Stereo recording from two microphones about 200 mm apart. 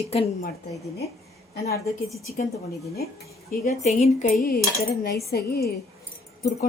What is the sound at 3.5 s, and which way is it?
Speech, 35° left (ahead or behind).